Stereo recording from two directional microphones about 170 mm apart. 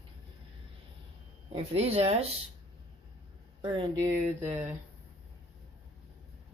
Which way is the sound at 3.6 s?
30° right (ahead or behind).